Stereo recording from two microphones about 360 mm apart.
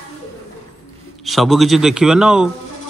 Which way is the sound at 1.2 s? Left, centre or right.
Centre.